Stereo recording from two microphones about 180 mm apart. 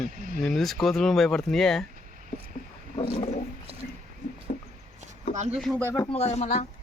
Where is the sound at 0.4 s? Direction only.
Centre (ahead or behind).